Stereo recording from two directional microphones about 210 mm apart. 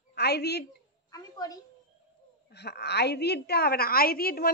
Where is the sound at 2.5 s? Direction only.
50° left (ahead or behind).